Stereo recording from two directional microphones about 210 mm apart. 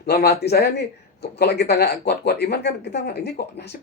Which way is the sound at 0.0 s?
50° left (ahead or behind).